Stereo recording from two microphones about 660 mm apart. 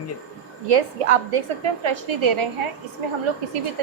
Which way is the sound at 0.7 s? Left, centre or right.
Right.